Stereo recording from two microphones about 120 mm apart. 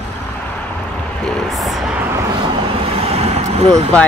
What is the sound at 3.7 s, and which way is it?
Speech, 10° left (ahead or behind).